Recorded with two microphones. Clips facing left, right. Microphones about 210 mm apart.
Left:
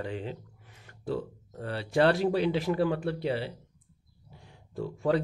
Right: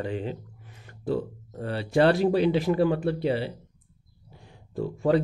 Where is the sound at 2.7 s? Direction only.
25° right (ahead or behind).